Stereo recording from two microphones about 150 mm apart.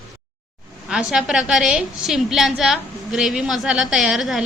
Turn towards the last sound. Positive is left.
turn(degrees=0)  # may be behind; listen again after turning